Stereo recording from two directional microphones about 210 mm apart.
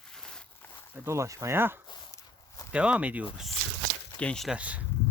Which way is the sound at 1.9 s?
15° left (ahead or behind).